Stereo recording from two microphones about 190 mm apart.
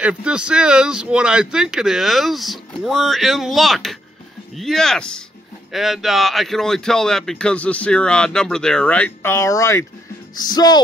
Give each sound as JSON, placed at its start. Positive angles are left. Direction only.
{"t": 0.0, "sound": "a man's voice", "side_deg": -5}